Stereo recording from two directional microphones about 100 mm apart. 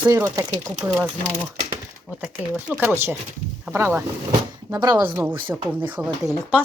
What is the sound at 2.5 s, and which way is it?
Speech, 15° right (ahead or behind).